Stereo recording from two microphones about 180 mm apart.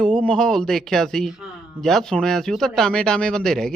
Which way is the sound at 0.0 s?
5° left (ahead or behind).